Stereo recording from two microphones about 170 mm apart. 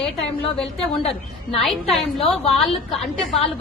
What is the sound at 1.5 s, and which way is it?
A woman's voice, centre (ahead or behind).